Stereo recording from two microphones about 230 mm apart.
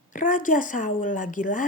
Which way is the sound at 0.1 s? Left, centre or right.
Left.